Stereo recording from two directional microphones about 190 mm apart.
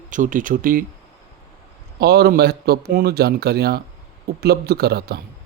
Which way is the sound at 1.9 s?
55° right (ahead or behind).